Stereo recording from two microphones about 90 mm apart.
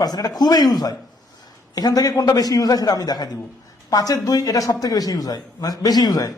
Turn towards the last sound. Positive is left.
turn(degrees=45)  # may be behind; listen again after turning